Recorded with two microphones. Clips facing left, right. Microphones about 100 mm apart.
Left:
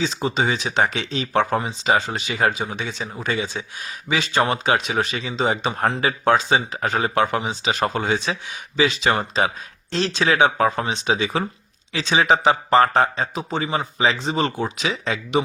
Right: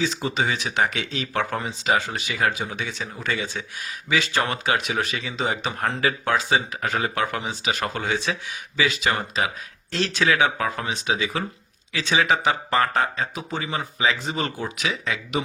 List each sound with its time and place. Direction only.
0.0 s speech: 20° left (ahead or behind)